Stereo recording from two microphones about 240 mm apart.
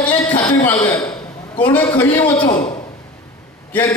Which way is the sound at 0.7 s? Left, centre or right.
Centre.